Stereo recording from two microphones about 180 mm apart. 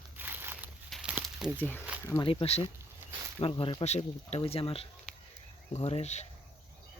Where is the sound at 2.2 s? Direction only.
30° left (ahead or behind).